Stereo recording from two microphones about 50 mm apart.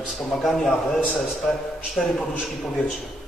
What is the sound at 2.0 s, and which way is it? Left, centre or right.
Speech, left.